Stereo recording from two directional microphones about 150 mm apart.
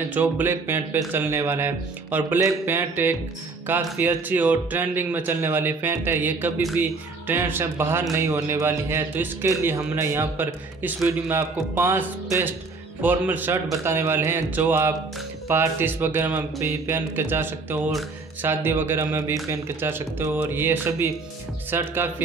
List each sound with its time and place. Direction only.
0.1 s speech: 10° right (ahead or behind)